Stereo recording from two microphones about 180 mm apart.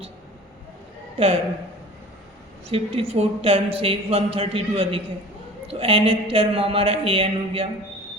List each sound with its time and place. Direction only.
2.6 s a woman's voice: 35° right (ahead or behind)